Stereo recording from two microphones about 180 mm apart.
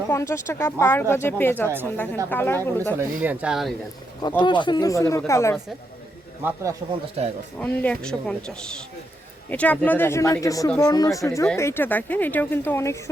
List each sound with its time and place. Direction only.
0.1 s speech: 15° left (ahead or behind)
3.2 s speech: 5° right (ahead or behind)
4.2 s speech: 25° left (ahead or behind)
6.4 s a man's voice: 15° right (ahead or behind)
7.2 s speech: 35° right (ahead or behind)
7.6 s speech: 10° left (ahead or behind)